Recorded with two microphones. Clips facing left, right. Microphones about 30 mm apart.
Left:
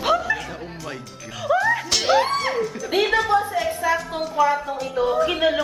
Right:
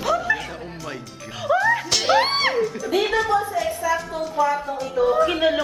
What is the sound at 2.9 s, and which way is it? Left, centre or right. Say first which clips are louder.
A woman's voice: left 2 dB; left.